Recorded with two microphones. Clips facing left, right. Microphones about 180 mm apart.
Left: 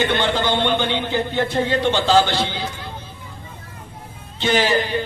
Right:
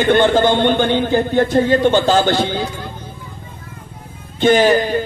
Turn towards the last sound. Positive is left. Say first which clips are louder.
# right 6 dB
turn(degrees=-45)  # may be behind; listen again after turning